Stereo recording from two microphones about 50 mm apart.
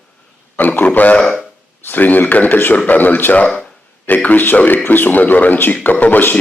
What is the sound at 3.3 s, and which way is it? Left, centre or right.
Speech, left.